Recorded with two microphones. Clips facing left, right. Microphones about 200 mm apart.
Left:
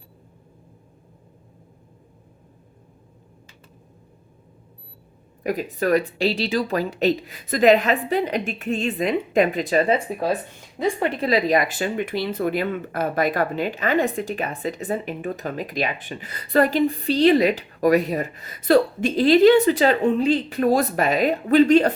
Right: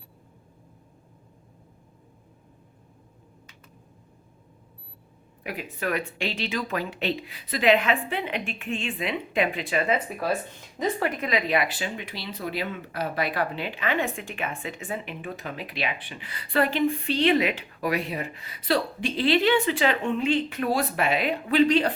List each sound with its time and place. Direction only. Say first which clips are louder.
5.4 s speech: left 9 dB; 40° left (ahead or behind)